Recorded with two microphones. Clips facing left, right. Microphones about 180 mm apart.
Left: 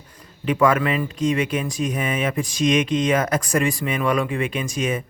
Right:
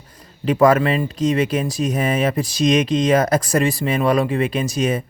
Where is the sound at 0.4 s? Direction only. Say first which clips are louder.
Right 4 dB; 35° right (ahead or behind).